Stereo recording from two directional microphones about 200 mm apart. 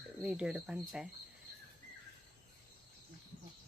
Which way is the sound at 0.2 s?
5° right (ahead or behind).